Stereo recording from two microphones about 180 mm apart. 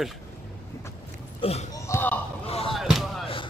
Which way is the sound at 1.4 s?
35° left (ahead or behind).